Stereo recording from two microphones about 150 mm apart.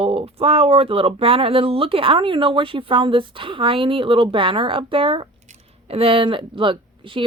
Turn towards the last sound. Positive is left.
turn(degrees=-35)  # may be behind; listen again after turning